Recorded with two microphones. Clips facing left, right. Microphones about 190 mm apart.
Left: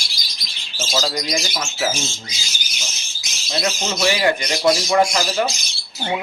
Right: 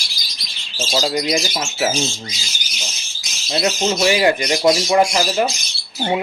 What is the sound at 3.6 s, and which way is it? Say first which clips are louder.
Speech: right 4 dB; 25° right (ahead or behind).